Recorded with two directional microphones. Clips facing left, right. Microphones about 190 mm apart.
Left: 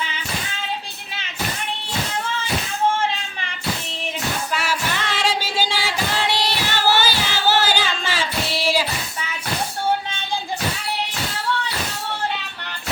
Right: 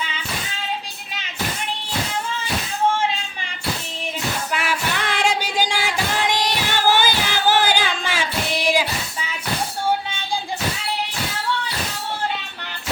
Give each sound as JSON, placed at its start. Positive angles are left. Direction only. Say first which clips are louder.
{"t": 4.5, "sound": "music", "louder": "right 1 dB", "side_deg": -15}
{"t": 8.2, "sound": "child singing", "louder": "right 1 dB", "side_deg": -15}